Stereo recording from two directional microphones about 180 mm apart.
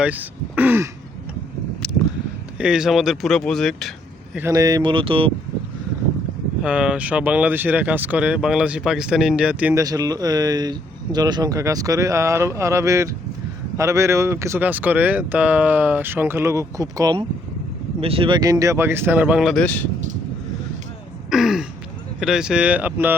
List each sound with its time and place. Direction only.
0.0 s speech: 10° right (ahead or behind)
2.6 s speech: 5° right (ahead or behind)
4.4 s speech: 15° right (ahead or behind)
6.6 s speech: 5° right (ahead or behind)
9.8 s speech: 20° right (ahead or behind)
18.0 s speech: 30° right (ahead or behind); by 19.6 s centre (ahead or behind)
19.6 s speech: 10° left (ahead or behind)
21.2 s throat clearing: centre (ahead or behind)
22.2 s speech: 5° right (ahead or behind)